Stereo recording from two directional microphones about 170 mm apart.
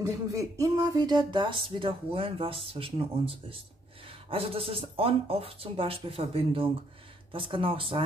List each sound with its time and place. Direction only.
0.0 s speech: 20° right (ahead or behind)